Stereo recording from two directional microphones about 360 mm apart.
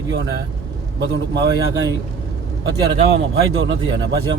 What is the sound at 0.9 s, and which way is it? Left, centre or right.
Speech, right.